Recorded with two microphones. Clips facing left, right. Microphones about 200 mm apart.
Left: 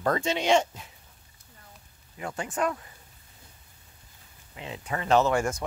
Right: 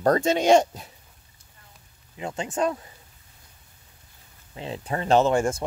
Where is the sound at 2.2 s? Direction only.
20° right (ahead or behind).